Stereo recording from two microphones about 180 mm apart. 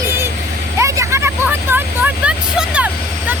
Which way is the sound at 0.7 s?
15° right (ahead or behind).